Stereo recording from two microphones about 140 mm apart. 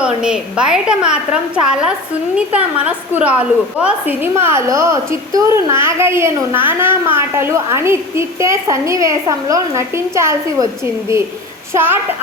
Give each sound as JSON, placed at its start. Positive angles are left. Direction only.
{"t": 0.0, "sound": "a woman's voice", "side_deg": -5}
{"t": 11.7, "sound": "a woman's voice", "side_deg": -15}